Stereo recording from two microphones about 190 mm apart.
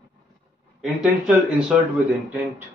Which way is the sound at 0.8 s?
5° right (ahead or behind).